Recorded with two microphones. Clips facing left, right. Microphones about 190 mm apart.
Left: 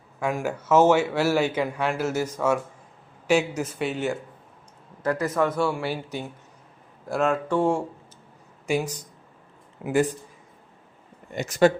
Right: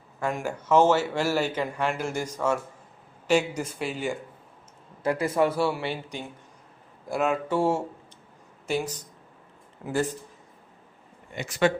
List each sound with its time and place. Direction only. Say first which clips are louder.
0.2 s speech: left 3 dB; 5° left (ahead or behind)
5.2 s speech: even; 10° right (ahead or behind)
8.6 s speech: left 3 dB; 10° left (ahead or behind)
11.3 s speech: left 5 dB; 40° left (ahead or behind)